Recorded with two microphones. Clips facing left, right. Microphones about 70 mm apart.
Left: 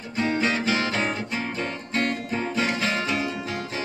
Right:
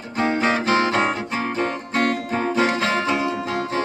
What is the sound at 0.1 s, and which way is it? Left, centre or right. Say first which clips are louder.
Music: right 4 dB; right.